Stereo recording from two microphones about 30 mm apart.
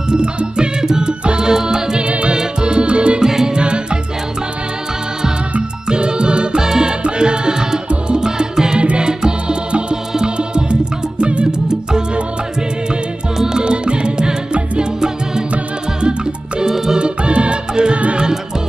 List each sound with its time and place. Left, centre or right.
0.1 s music: right
0.8 s music: right
2.0 s music: right
2.3 s music: right
3.2 s music: right
3.5 s music: right
5.6 s music: right
7.0 s music: right
13.4 s music: right
13.7 s music: right
16.7 s music: centre
17.0 s music: right
17.9 s music: right